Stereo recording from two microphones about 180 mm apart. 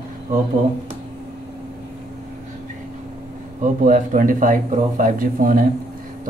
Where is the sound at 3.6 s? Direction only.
45° right (ahead or behind).